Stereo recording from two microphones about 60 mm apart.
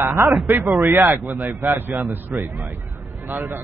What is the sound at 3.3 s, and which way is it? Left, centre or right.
Speech, right.